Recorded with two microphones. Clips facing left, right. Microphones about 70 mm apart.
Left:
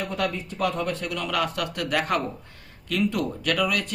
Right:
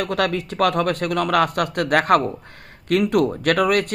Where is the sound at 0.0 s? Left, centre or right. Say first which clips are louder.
Right 6 dB; right.